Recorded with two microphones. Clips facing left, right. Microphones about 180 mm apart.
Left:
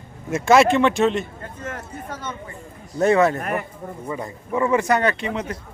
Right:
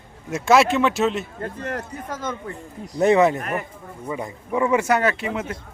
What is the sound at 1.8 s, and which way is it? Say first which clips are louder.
Speech: right 2 dB; 45° right (ahead or behind).